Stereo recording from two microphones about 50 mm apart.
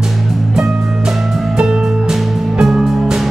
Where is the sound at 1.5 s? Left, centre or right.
Centre.